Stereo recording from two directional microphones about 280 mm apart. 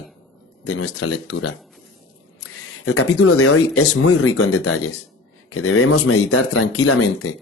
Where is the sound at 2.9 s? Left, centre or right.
Left.